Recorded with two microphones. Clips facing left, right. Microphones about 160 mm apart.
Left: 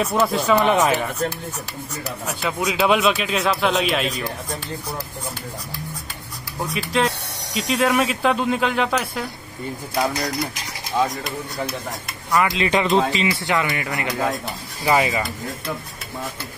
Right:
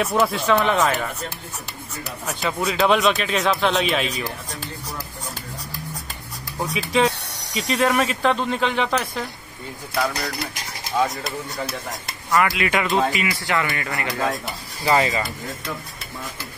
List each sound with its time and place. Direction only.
0.0 s speech: centre (ahead or behind)
2.4 s speech: centre (ahead or behind)
6.6 s speech: centre (ahead or behind)
11.2 s speech: centre (ahead or behind)
12.3 s speech: 20° left (ahead or behind)